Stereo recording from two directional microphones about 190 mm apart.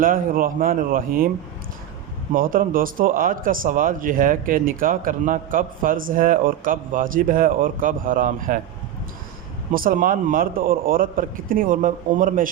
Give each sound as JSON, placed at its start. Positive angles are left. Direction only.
{"t": 0.0, "sound": "speech", "side_deg": -45}
{"t": 2.3, "sound": "speech", "side_deg": -45}
{"t": 9.7, "sound": "speech", "side_deg": -45}